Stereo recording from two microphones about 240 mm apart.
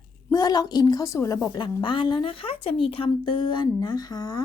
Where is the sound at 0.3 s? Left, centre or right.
Centre.